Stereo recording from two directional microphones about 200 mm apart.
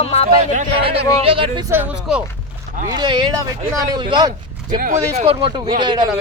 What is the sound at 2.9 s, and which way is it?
Speech, 20° right (ahead or behind).